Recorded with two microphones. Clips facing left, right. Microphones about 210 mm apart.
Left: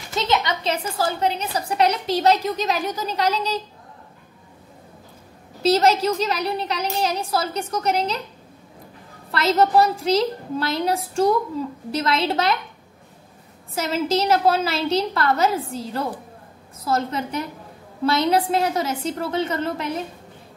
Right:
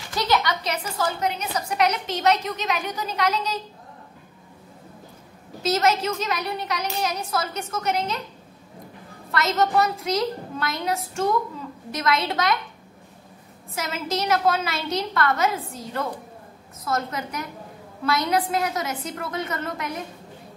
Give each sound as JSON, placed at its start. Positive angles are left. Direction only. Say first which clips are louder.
{"t": 0.1, "sound": "a woman's voice", "louder": "left 1 dB", "side_deg": 25}
{"t": 5.6, "sound": "a woman's voice", "louder": "left 4 dB", "side_deg": 30}
{"t": 9.3, "sound": "a woman's voice", "louder": "left 4 dB", "side_deg": 30}
{"t": 13.7, "sound": "a woman's voice", "louder": "left 6 dB", "side_deg": 30}